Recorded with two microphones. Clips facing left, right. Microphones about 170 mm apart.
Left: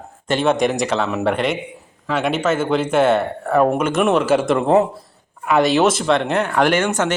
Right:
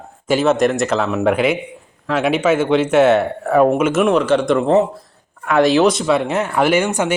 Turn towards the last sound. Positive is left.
turn(degrees=-10)  # may be behind; listen again after turning